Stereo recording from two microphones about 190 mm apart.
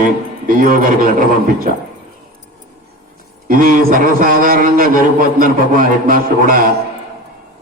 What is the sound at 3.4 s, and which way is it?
A man's voice, 45° right (ahead or behind).